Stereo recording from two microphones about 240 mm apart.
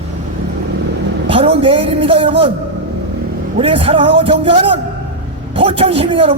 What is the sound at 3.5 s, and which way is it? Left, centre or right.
Speech, right.